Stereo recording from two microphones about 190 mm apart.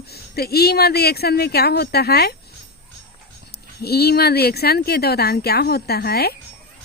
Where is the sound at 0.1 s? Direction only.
55° left (ahead or behind).